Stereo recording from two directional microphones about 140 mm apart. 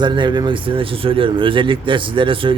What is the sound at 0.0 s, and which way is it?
A man's voice, 35° right (ahead or behind).